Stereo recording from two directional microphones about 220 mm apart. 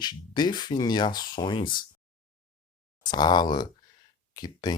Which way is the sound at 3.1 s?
20° left (ahead or behind).